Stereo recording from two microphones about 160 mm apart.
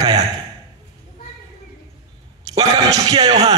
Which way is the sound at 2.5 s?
25° right (ahead or behind).